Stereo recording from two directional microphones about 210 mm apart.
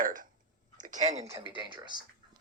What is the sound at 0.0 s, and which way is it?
Speech, 40° right (ahead or behind).